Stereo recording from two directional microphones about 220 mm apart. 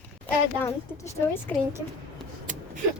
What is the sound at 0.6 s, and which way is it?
Speech, 10° left (ahead or behind).